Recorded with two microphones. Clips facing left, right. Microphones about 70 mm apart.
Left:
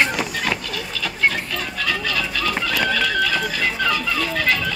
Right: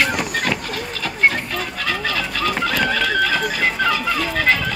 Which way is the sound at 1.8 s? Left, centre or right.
Right.